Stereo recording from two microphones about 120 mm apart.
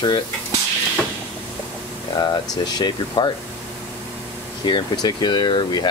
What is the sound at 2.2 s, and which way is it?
Speech, 35° left (ahead or behind).